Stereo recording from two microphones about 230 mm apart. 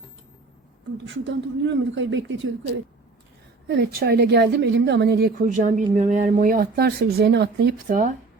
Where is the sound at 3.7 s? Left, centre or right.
Right.